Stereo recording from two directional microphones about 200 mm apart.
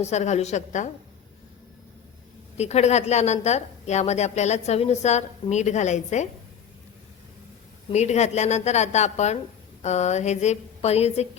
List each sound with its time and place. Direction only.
0.0 s a woman's voice: 35° left (ahead or behind)
2.6 s a woman's voice: 35° left (ahead or behind)
7.9 s a woman's voice: 35° left (ahead or behind)